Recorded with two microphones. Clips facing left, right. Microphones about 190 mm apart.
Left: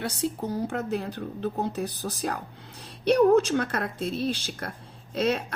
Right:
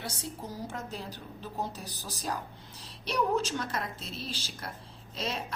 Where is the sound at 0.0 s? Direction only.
65° left (ahead or behind).